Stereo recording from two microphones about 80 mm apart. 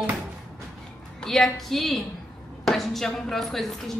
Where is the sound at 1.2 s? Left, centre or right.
Centre.